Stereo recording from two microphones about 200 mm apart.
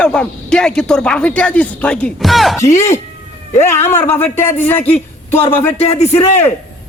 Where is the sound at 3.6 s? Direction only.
10° left (ahead or behind).